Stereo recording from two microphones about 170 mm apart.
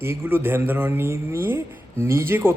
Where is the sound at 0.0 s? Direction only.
15° right (ahead or behind).